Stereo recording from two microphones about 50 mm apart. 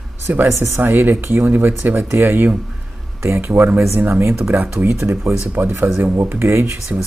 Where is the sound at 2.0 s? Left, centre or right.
Right.